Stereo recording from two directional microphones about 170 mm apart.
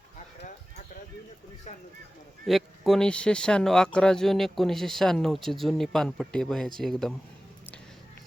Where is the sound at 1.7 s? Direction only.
40° left (ahead or behind).